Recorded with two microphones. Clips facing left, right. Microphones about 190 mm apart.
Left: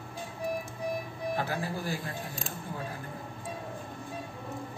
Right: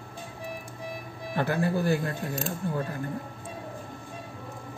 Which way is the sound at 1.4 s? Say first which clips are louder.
Right 11 dB; 60° right (ahead or behind).